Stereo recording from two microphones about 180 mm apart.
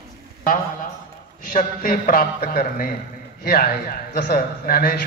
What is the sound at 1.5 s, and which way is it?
A man's voice, 50° left (ahead or behind).